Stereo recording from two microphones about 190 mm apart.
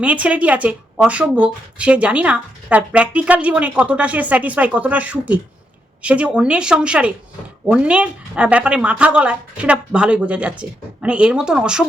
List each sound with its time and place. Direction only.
0.0 s speech: 5° right (ahead or behind)